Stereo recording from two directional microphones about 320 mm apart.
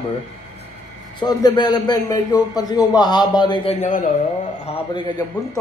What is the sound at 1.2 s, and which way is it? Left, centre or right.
A man's voice, centre.